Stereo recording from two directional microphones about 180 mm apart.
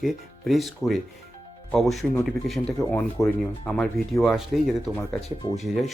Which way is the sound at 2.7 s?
20° left (ahead or behind).